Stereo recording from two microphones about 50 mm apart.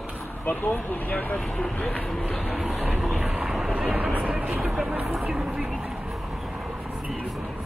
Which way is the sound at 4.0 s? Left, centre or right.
Right.